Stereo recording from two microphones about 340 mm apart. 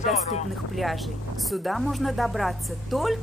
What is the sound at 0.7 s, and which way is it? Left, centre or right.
Speech, centre.